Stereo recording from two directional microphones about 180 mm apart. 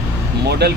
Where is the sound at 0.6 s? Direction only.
65° right (ahead or behind).